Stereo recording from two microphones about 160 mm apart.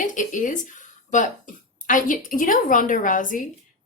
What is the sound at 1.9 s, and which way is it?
Speech, 55° left (ahead or behind).